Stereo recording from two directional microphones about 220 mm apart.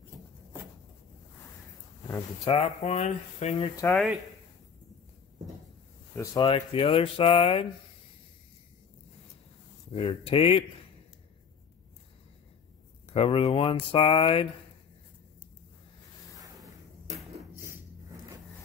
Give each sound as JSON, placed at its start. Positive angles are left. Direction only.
{"t": 2.5, "sound": "speech", "side_deg": 30}
{"t": 3.8, "sound": "speech", "side_deg": 5}
{"t": 6.1, "sound": "speech", "side_deg": 20}
{"t": 9.9, "sound": "speech", "side_deg": 25}
{"t": 13.1, "sound": "speech", "side_deg": 25}